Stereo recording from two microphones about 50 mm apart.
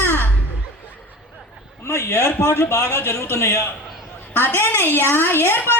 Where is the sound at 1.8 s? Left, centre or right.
Left.